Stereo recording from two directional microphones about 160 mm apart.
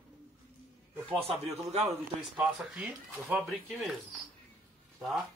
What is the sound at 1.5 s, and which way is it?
Speech, 40° right (ahead or behind).